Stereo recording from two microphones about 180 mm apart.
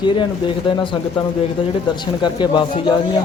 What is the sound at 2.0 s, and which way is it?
Speech, 25° left (ahead or behind).